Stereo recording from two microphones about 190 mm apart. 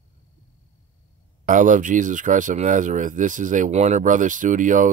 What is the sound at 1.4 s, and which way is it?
Speech, 45° right (ahead or behind).